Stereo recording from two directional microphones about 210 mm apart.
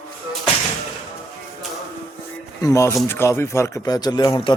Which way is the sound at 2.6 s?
15° left (ahead or behind).